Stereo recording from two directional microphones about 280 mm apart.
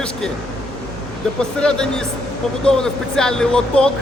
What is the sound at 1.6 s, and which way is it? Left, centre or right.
Speech, centre.